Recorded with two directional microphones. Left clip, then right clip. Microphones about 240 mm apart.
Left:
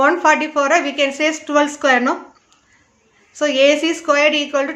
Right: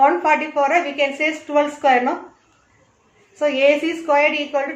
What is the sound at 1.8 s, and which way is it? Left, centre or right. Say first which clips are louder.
Speech: right 1 dB; left.